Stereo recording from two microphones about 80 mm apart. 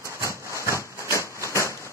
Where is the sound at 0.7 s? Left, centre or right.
Left.